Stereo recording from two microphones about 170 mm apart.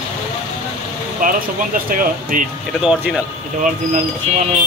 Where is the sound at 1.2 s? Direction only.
55° right (ahead or behind).